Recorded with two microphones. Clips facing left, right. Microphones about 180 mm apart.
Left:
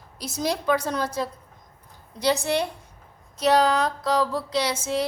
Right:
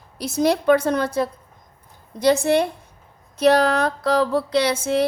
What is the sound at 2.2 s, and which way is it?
Speech, 50° right (ahead or behind).